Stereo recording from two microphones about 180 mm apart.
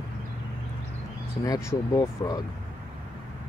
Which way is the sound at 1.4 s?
20° left (ahead or behind).